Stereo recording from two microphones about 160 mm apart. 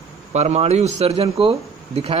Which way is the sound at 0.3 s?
45° right (ahead or behind).